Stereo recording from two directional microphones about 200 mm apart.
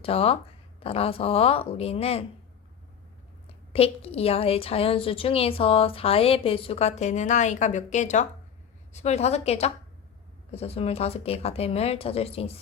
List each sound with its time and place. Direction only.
0.0 s a woman's voice: 30° left (ahead or behind)
3.7 s a woman's voice: 30° left (ahead or behind)